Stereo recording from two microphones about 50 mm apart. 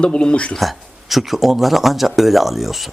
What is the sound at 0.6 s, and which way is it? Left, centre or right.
Speech, centre.